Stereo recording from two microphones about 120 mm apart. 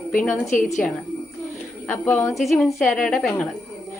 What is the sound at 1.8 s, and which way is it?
Speech, 20° left (ahead or behind).